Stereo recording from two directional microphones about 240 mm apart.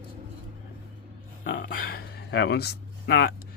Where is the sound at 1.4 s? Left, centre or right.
Left.